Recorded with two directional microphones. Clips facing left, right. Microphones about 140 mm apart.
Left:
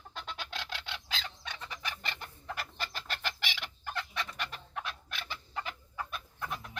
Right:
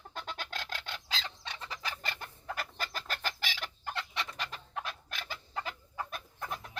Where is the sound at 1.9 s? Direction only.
45° right (ahead or behind).